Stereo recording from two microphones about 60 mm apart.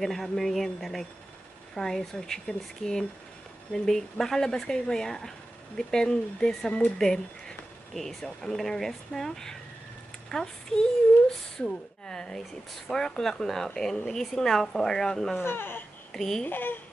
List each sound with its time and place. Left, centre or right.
0.0 s speech: centre
15.3 s speech: left
16.1 s speech: centre
16.4 s speech: left